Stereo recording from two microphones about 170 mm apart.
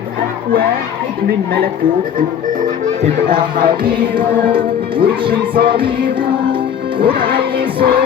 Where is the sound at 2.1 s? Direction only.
50° right (ahead or behind).